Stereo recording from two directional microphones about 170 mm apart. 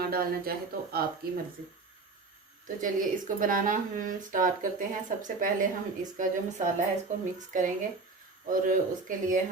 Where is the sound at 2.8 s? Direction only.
50° right (ahead or behind).